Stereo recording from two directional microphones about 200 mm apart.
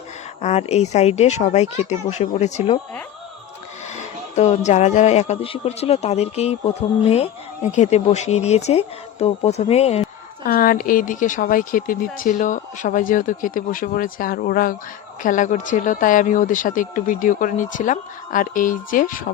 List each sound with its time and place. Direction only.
0.4 s speech: 35° left (ahead or behind)
3.9 s speech: 35° left (ahead or behind)
7.7 s speech: 35° left (ahead or behind)
10.4 s speech: 45° left (ahead or behind)